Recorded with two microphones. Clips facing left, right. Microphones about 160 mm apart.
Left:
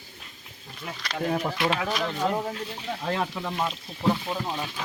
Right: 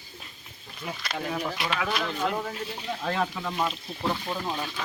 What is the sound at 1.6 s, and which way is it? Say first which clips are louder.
Speech: left 3 dB; 30° left (ahead or behind).